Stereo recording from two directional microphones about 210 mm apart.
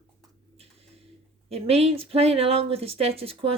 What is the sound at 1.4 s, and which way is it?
Speech, 30° right (ahead or behind).